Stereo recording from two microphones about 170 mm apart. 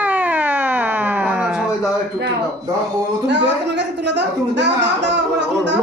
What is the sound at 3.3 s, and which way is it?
A woman's voice, 90° right.